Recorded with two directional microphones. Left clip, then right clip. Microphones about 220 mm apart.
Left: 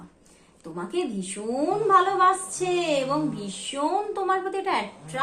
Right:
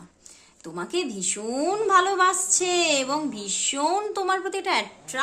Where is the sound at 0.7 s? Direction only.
45° right (ahead or behind).